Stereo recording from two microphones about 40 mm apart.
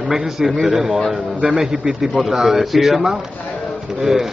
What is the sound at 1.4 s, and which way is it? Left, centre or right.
Speech, centre.